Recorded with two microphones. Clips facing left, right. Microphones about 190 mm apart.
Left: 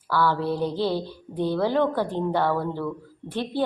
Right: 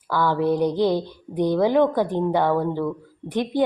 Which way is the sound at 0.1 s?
15° right (ahead or behind).